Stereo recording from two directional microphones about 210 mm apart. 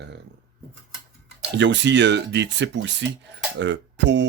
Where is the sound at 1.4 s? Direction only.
55° right (ahead or behind).